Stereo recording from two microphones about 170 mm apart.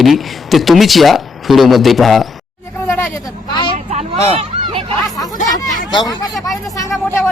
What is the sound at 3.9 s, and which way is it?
Speech, 40° right (ahead or behind).